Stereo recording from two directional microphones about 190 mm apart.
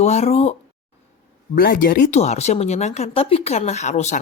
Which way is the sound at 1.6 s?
50° left (ahead or behind).